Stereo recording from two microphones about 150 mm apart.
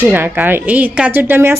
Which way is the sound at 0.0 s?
15° right (ahead or behind).